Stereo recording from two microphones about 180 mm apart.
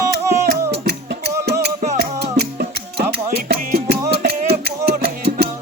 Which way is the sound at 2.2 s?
65° right (ahead or behind).